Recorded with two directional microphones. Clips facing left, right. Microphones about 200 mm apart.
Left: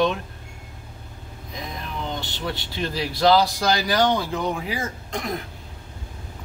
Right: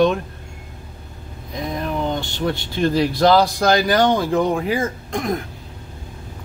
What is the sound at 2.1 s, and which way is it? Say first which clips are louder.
Speech: right 7 dB; 50° right (ahead or behind).